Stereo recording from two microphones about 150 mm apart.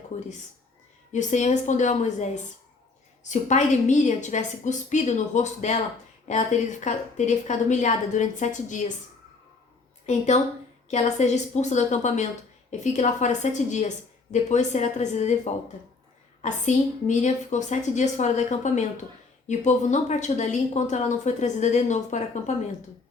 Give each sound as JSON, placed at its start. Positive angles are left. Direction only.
{"t": 1.1, "sound": "a woman's voice", "side_deg": 55}
{"t": 10.1, "sound": "a woman's voice", "side_deg": 50}